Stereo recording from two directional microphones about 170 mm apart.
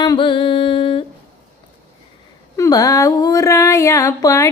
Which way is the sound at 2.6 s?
20° left (ahead or behind).